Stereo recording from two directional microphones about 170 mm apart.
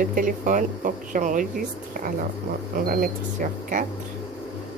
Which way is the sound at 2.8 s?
55° right (ahead or behind).